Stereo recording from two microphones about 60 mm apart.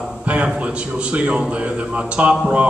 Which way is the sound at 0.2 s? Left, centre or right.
Right.